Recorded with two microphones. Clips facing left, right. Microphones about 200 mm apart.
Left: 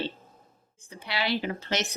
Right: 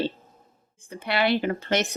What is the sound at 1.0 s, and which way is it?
Speech, 55° right (ahead or behind).